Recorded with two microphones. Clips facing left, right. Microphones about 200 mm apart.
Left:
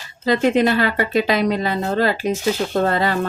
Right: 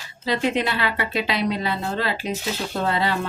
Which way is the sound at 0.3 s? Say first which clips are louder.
Left 7 dB; 45° left (ahead or behind).